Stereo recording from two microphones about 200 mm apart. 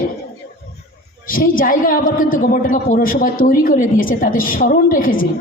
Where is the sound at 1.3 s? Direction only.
45° left (ahead or behind).